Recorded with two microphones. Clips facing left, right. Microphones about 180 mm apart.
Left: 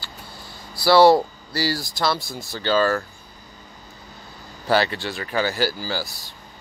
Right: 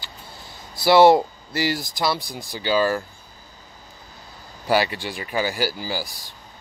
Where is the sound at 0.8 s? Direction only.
20° right (ahead or behind).